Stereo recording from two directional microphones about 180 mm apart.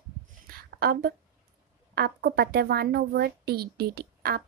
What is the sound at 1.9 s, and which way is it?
Speech, 65° right (ahead or behind).